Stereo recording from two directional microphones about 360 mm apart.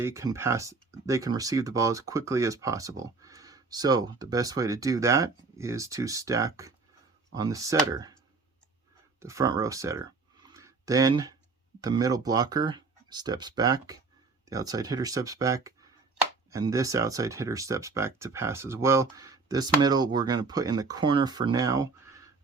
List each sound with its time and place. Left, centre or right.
0.0 s speech: centre
9.2 s speech: centre
10.4 s a sound: centre
11.8 s speech: centre